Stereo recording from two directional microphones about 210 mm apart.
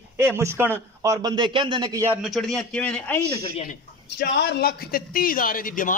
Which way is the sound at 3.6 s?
50° left (ahead or behind).